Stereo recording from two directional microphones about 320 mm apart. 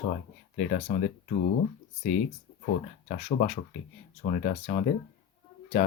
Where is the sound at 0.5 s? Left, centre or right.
Left.